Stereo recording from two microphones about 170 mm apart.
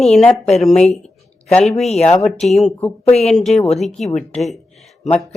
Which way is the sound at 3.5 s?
40° left (ahead or behind).